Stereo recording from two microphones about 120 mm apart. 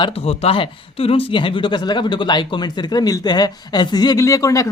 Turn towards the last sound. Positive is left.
turn(degrees=30)  # may be behind; listen again after turning